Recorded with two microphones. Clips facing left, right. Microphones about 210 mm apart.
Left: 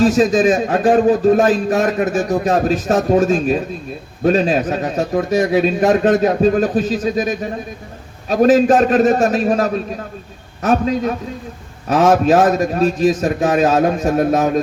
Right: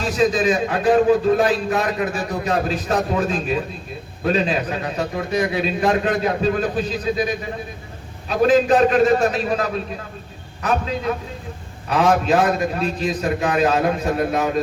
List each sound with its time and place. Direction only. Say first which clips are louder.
0.0 s a man's voice: left 6 dB; 45° left (ahead or behind)